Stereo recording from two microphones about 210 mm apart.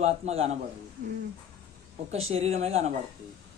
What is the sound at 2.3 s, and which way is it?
Speech, 30° right (ahead or behind).